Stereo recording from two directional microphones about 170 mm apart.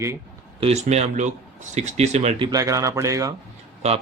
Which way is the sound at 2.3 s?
25° right (ahead or behind).